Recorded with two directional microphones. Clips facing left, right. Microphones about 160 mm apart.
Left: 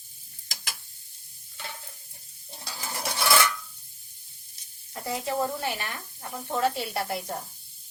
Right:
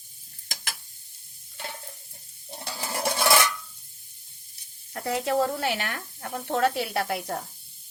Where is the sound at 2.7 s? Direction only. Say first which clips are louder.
Right 5 dB; 60° right (ahead or behind).